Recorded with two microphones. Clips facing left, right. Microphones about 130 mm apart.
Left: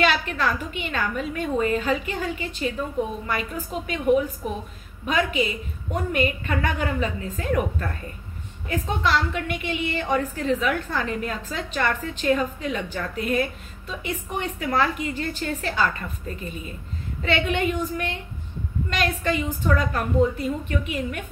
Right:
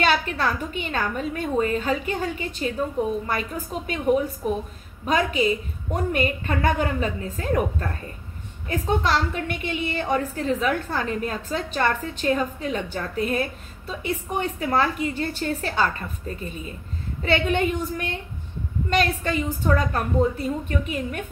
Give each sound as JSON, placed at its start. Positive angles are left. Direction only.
{"t": 0.0, "sound": "a woman's voice", "side_deg": -40}
{"t": 8.6, "sound": "a woman's voice", "side_deg": -35}